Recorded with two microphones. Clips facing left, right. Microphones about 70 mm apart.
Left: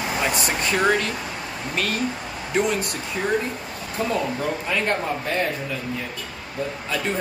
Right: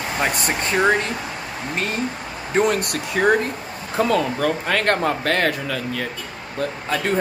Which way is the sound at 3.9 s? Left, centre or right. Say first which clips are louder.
Right 5 dB; right.